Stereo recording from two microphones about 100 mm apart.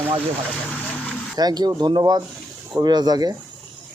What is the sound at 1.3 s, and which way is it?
Speech, 40° right (ahead or behind).